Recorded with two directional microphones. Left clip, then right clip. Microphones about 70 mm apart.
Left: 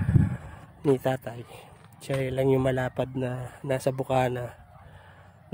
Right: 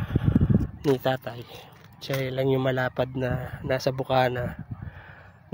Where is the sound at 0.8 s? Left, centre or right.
Left.